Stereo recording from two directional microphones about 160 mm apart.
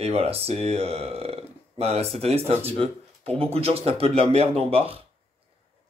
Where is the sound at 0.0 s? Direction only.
40° right (ahead or behind).